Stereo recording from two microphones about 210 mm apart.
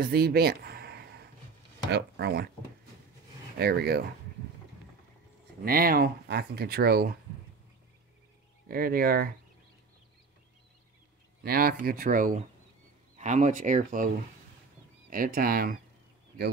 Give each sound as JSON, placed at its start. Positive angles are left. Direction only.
{"t": 0.0, "sound": "speech", "side_deg": -45}
{"t": 3.5, "sound": "speech", "side_deg": -50}
{"t": 5.7, "sound": "speech", "side_deg": -45}
{"t": 8.6, "sound": "speech", "side_deg": -45}
{"t": 11.4, "sound": "speech", "side_deg": -45}